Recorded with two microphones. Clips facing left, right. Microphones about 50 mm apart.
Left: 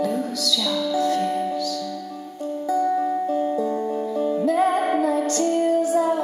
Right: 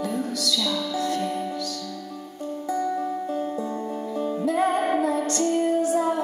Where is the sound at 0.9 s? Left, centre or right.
Centre.